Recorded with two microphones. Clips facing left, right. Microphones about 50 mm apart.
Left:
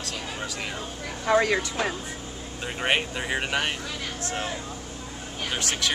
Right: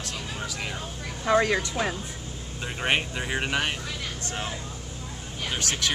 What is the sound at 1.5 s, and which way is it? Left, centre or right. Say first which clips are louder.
Speech: even; centre.